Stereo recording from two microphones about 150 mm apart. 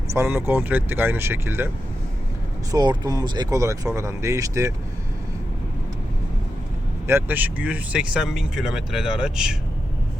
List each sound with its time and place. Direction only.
0.1 s speech: 15° right (ahead or behind)
2.7 s speech: 30° right (ahead or behind)
7.1 s speech: 15° right (ahead or behind)